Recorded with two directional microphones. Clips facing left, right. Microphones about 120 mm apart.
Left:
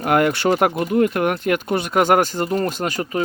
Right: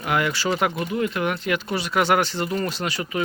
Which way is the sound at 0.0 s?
50° left (ahead or behind).